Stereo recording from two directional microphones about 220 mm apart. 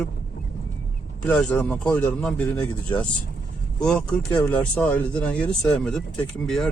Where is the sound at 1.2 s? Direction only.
5° left (ahead or behind).